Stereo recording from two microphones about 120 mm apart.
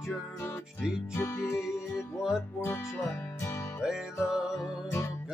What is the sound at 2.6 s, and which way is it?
Music, 25° left (ahead or behind).